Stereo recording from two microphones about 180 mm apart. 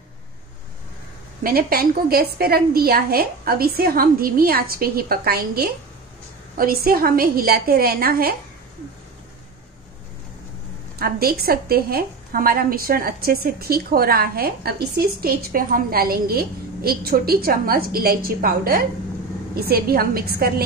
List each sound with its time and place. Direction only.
1.4 s a woman's voice: 55° right (ahead or behind)
11.0 s a woman's voice: 55° right (ahead or behind)